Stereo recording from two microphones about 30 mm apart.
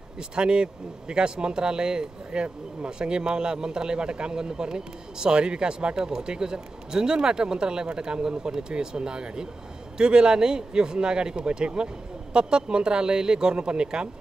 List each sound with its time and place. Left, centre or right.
0.4 s a man's voice: right
5.9 s a man's voice: right